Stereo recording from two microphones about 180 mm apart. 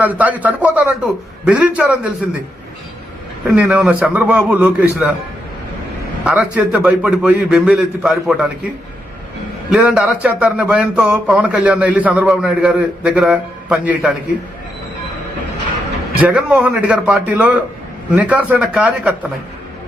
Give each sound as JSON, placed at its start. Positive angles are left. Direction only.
{"t": 0.0, "sound": "a man's voice", "side_deg": -10}
{"t": 3.4, "sound": "a man's voice", "side_deg": -5}
{"t": 6.2, "sound": "a man's voice", "side_deg": -10}
{"t": 9.6, "sound": "speech", "side_deg": -5}
{"t": 16.1, "sound": "a man's voice", "side_deg": -5}